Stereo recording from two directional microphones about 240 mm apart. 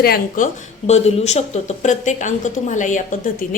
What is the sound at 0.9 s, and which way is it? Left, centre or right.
A woman's voice, left.